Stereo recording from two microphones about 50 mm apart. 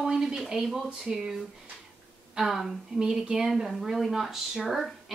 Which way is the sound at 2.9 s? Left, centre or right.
Centre.